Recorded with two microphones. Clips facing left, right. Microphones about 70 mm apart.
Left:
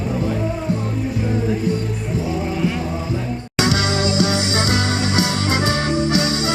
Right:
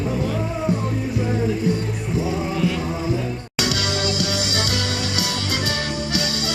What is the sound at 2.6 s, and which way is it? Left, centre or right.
Music, left.